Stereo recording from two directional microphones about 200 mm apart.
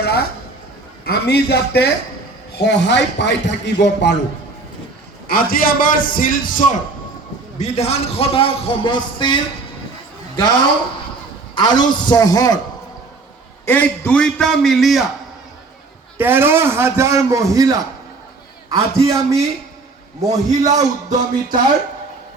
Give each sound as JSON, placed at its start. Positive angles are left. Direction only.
{"t": 1.0, "sound": "a man's voice", "side_deg": 55}
{"t": 5.3, "sound": "a man's voice", "side_deg": 45}
{"t": 13.7, "sound": "a man's voice", "side_deg": 10}
{"t": 16.1, "sound": "a man's voice", "side_deg": -10}
{"t": 20.7, "sound": "music", "side_deg": -40}